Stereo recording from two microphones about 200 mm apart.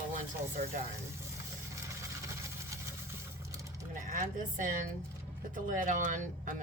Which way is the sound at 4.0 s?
40° right (ahead or behind).